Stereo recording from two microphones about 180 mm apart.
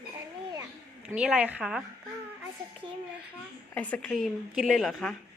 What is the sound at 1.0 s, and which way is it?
Speech, 5° right (ahead or behind).